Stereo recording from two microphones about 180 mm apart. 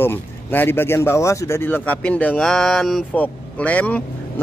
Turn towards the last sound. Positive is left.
turn(degrees=10)  # may be behind; listen again after turning